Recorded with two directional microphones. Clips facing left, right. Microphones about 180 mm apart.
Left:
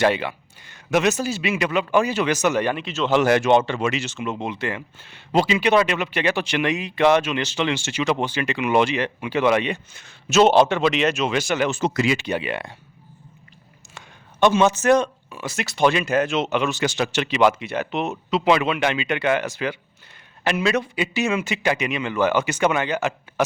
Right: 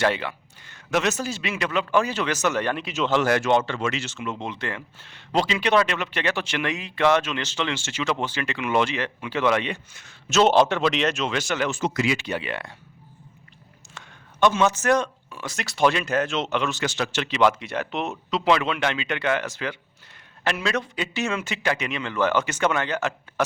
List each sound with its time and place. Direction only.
0.0 s speech: 15° left (ahead or behind)
2.8 s speech: 10° right (ahead or behind)
3.1 s speech: 15° left (ahead or behind)
9.9 s speech: 25° left (ahead or behind)
10.2 s speech: 5° left (ahead or behind)
11.7 s speech: 30° left (ahead or behind)
12.2 s speech: 15° left (ahead or behind)
13.9 s a sound: 20° left (ahead or behind)
15.3 s speech: 5° left (ahead or behind)